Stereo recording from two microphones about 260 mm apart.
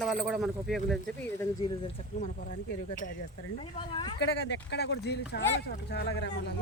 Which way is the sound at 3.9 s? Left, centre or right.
Centre.